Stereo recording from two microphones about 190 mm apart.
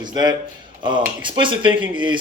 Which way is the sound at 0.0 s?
20° right (ahead or behind).